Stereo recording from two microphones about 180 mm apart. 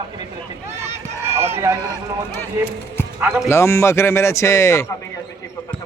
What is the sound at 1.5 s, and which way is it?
Run, 15° right (ahead or behind).